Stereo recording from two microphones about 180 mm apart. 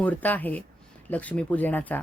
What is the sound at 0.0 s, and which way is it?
Speech, 10° left (ahead or behind).